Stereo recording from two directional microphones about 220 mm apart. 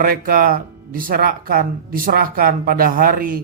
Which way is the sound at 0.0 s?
40° right (ahead or behind).